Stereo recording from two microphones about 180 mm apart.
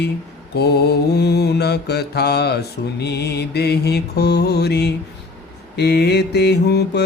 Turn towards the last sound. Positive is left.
turn(degrees=65)  # may be behind; listen again after turning